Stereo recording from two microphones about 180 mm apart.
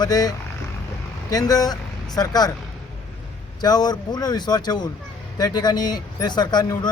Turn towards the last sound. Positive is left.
turn(degrees=25)  # may be behind; listen again after turning